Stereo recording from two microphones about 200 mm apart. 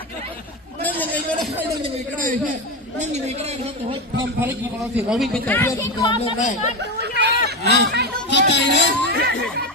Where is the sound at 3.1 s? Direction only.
35° right (ahead or behind).